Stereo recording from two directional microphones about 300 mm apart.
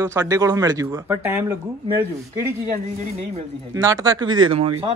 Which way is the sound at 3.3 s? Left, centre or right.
Centre.